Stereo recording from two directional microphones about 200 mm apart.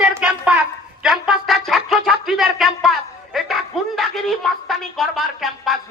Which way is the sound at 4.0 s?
Centre (ahead or behind).